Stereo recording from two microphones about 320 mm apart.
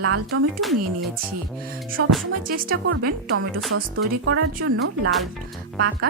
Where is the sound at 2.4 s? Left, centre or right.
Right.